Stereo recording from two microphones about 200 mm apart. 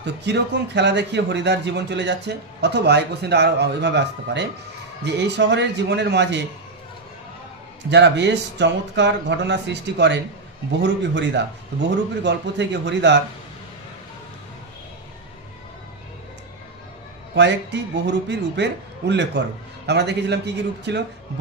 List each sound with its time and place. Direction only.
0.0 s speech: 60° right (ahead or behind)
7.9 s speech: 60° right (ahead or behind)
17.3 s speech: 60° right (ahead or behind)